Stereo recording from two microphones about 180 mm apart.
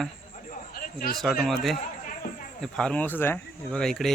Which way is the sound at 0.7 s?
55° left (ahead or behind).